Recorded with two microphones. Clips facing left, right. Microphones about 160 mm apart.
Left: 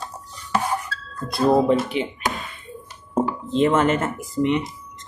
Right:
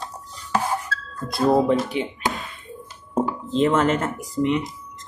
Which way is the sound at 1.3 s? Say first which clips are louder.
Left 1 dB; centre (ahead or behind).